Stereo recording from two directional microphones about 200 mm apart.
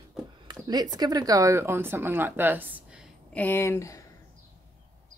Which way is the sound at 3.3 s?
10° left (ahead or behind).